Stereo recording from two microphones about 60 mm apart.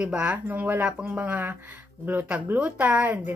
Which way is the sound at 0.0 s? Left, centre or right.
Right.